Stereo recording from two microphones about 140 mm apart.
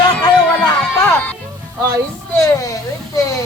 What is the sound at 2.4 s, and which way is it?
Speech, 20° left (ahead or behind).